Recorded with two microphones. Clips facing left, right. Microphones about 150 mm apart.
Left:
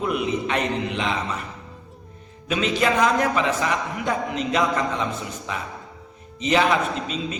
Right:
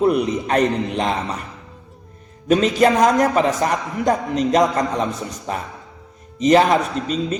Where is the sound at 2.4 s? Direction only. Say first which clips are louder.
Right 7 dB; 45° right (ahead or behind).